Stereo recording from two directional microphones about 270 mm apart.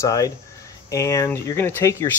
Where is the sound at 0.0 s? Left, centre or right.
Centre.